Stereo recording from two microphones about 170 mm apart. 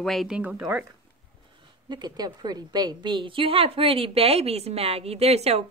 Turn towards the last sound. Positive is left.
turn(degrees=-40)  # may be behind; listen again after turning